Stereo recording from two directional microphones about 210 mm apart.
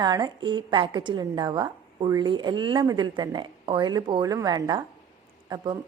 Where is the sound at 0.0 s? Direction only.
20° right (ahead or behind).